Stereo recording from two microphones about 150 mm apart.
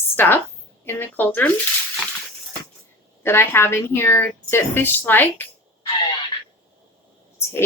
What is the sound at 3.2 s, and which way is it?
A woman's voice, 15° left (ahead or behind).